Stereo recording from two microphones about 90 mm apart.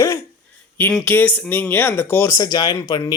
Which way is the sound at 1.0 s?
20° left (ahead or behind).